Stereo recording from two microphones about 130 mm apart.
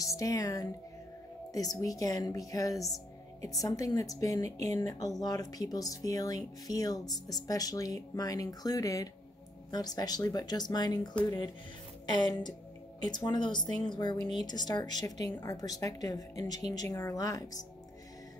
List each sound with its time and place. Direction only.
0.0 s speech: 25° left (ahead or behind)
12.1 s speech: 30° left (ahead or behind)